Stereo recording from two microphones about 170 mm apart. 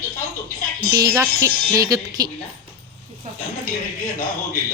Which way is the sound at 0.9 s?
15° right (ahead or behind).